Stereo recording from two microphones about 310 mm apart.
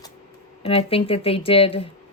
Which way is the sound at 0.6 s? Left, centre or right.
Centre.